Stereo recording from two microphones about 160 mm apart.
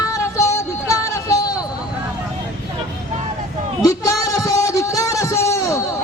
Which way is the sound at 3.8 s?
20° left (ahead or behind).